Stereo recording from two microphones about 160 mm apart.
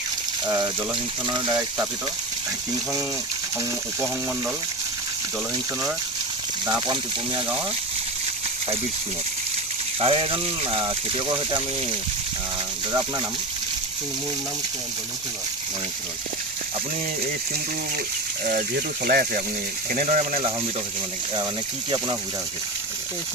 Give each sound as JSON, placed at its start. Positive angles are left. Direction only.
{"t": 1.3, "sound": "speech", "side_deg": -25}
{"t": 10.0, "sound": "speech", "side_deg": -35}
{"t": 12.9, "sound": "speech", "side_deg": -25}
{"t": 19.0, "sound": "speech", "side_deg": -65}
{"t": 20.0, "sound": "speech", "side_deg": -55}